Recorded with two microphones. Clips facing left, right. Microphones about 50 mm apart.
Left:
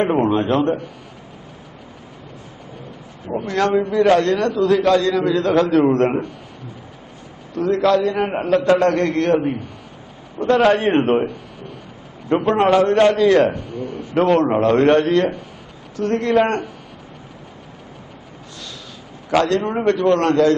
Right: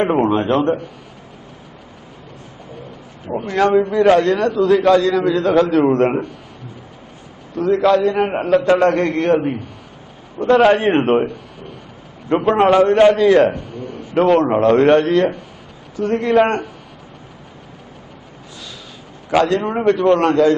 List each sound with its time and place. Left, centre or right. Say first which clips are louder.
0.0 s a man's voice: right 1 dB; centre
3.2 s a man's voice: right 3 dB; centre
7.5 s a man's voice: right 2 dB; centre
12.3 s a man's voice: right 2 dB; centre
13.7 s a man's voice: left 2 dB; centre
19.3 s a man's voice: right 1 dB; centre